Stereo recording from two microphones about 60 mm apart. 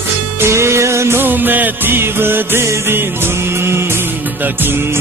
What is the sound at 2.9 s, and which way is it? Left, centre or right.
Music, right.